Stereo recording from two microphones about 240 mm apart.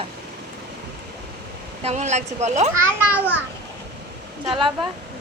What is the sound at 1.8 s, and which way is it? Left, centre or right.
Speech, right.